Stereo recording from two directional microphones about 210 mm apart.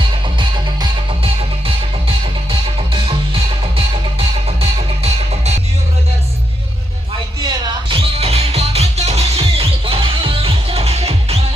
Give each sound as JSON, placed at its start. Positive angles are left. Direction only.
{"t": 0.3, "sound": "music", "side_deg": -20}
{"t": 7.4, "sound": "music", "side_deg": -20}